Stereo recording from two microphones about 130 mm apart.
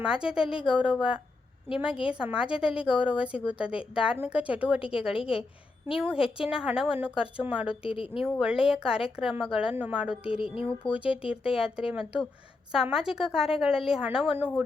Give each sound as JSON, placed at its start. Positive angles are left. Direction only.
{"t": 0.0, "sound": "a woman's voice", "side_deg": -5}
{"t": 4.8, "sound": "speech", "side_deg": 45}
{"t": 6.3, "sound": "a woman's voice", "side_deg": -5}
{"t": 7.8, "sound": "speech", "side_deg": 45}
{"t": 8.7, "sound": "a woman's voice", "side_deg": -5}
{"t": 10.2, "sound": "speech", "side_deg": 45}
{"t": 11.6, "sound": "a woman's voice", "side_deg": -5}